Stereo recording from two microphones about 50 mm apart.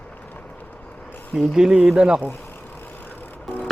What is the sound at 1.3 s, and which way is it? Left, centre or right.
Speech, centre.